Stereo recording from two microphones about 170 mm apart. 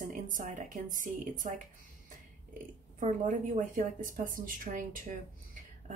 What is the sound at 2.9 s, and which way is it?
A woman's voice, 50° right (ahead or behind).